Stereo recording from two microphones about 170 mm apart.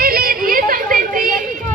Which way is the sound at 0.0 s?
60° right (ahead or behind).